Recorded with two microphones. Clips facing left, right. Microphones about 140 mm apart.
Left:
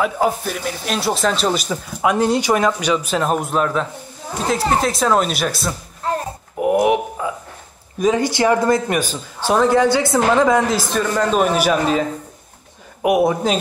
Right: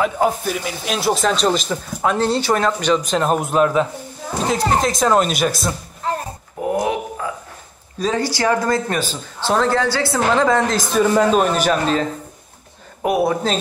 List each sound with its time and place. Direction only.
0.0 s speech: centre (ahead or behind)
6.6 s a sound: 15° left (ahead or behind)
8.0 s speech: 20° left (ahead or behind)
10.9 s speech: 10° right (ahead or behind)
11.3 s speech: 10° left (ahead or behind)